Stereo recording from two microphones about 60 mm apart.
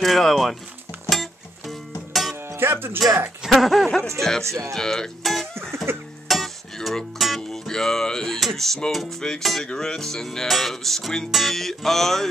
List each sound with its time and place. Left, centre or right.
0.0 s music: centre
2.6 s speech: right
3.4 s music: centre
4.2 s speech: centre
4.7 s music: centre